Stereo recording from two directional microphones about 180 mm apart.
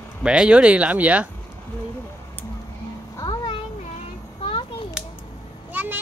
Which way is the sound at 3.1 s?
25° left (ahead or behind).